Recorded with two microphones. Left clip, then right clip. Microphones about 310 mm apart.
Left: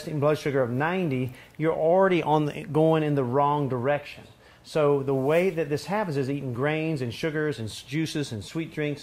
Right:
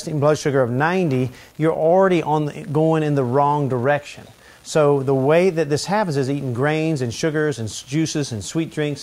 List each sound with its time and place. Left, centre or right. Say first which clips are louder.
0.0 s speech: right 6 dB; right; by 3.0 s centre
3.0 s speech: right 6 dB; right